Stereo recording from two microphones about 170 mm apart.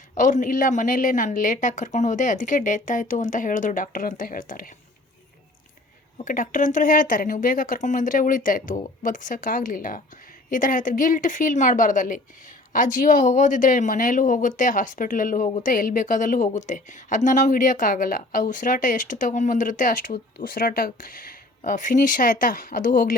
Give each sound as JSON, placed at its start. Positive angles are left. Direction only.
{"t": 0.1, "sound": "a woman's voice", "side_deg": 50}
{"t": 6.2, "sound": "a woman's voice", "side_deg": 50}